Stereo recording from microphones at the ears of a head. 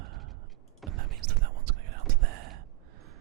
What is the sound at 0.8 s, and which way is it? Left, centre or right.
Whispering, right.